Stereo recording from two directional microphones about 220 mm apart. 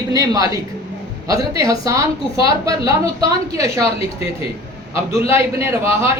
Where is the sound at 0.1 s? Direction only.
15° right (ahead or behind).